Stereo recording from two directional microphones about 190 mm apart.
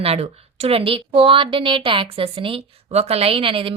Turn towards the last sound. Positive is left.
turn(degrees=-30)  # may be behind; listen again after turning